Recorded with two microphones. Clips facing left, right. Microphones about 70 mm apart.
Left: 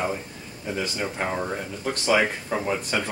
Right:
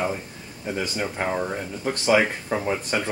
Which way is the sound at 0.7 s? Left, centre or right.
Centre.